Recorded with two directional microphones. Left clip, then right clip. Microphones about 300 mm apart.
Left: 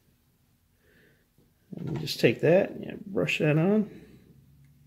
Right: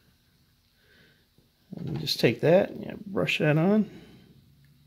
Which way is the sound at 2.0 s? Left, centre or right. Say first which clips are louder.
Even; right.